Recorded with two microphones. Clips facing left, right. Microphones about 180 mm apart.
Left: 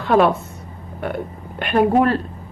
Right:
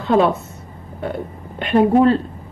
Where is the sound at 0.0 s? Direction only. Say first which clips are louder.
Even; 25° right (ahead or behind).